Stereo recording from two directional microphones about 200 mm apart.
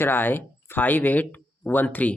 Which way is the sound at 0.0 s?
10° left (ahead or behind).